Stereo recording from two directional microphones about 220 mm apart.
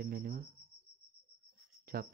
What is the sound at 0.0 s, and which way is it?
Cricket, 40° right (ahead or behind).